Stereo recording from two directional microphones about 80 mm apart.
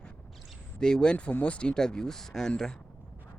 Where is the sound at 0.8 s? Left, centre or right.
Centre.